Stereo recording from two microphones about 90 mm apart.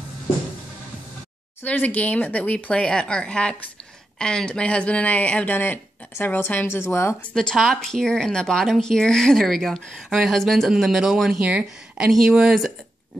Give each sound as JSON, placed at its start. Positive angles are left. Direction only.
{"t": 1.6, "sound": "speech", "side_deg": 20}
{"t": 7.3, "sound": "speech", "side_deg": 5}